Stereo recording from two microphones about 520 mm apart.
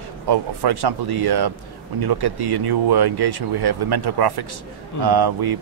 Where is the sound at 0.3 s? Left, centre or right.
Right.